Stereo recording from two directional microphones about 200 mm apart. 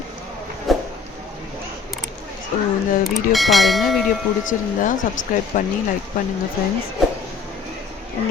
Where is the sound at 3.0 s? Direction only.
Centre (ahead or behind).